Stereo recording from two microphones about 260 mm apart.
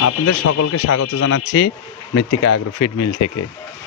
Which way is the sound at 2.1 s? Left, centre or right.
Left.